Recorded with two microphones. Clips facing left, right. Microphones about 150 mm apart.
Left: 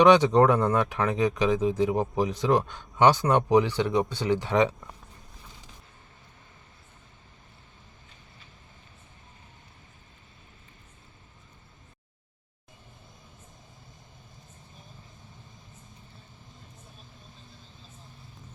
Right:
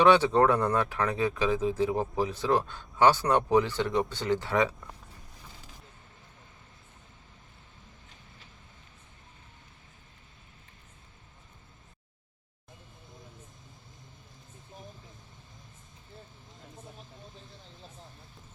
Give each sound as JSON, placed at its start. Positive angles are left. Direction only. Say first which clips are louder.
{"t": 0.0, "sound": "speech", "louder": "left 3 dB", "side_deg": 15}